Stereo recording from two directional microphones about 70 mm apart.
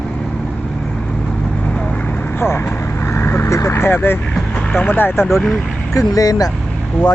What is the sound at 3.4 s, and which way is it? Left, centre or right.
Vehicle, left.